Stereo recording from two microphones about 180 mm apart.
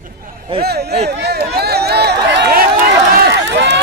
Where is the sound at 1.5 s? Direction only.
60° right (ahead or behind).